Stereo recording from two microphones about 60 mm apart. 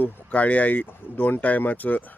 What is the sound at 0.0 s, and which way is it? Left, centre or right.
Speech, left.